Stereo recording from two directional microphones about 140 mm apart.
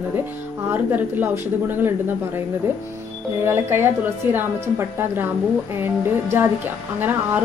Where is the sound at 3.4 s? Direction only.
15° right (ahead or behind).